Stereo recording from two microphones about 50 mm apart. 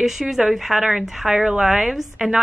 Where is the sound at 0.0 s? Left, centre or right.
Centre.